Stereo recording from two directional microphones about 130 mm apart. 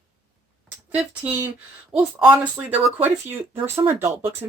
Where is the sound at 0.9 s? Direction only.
10° right (ahead or behind).